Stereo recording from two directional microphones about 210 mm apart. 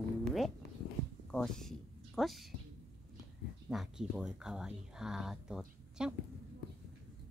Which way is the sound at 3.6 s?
Centre (ahead or behind).